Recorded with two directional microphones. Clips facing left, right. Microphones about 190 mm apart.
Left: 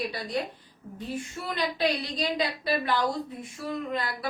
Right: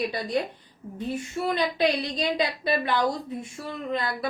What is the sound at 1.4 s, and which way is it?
Speech, 30° right (ahead or behind).